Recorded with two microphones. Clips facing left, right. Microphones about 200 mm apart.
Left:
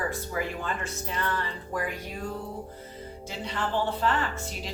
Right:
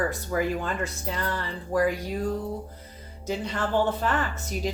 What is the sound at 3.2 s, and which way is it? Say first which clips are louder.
Speech: right 5 dB; 45° right (ahead or behind).